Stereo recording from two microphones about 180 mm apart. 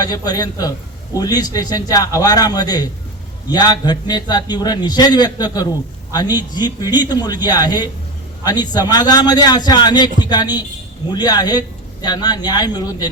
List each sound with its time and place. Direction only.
0.0 s a man's voice: 20° left (ahead or behind)